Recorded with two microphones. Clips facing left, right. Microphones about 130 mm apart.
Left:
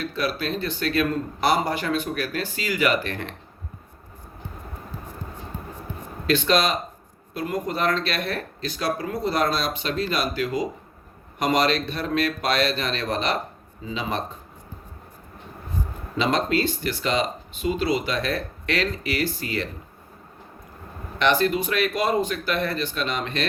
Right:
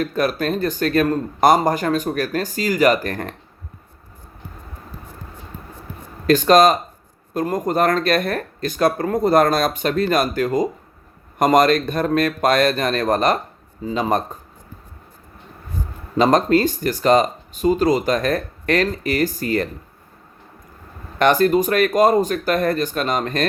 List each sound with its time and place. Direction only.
0.0 s speech: 45° right (ahead or behind)
6.2 s speech: 45° right (ahead or behind)
16.1 s speech: 45° right (ahead or behind)
21.2 s speech: 45° right (ahead or behind)